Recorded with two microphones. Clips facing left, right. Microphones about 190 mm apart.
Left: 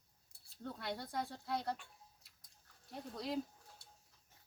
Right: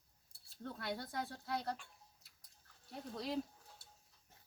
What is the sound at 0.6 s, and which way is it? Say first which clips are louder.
Speech: even; centre (ahead or behind).